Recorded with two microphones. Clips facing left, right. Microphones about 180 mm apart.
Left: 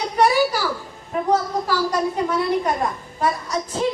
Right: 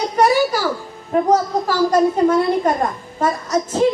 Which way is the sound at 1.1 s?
45° right (ahead or behind).